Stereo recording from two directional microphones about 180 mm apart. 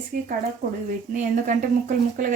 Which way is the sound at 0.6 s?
45° right (ahead or behind).